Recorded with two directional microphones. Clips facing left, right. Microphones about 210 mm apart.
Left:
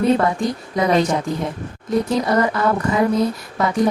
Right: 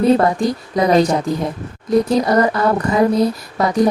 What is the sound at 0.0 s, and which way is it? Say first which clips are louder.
Speech: right 3 dB; 35° right (ahead or behind).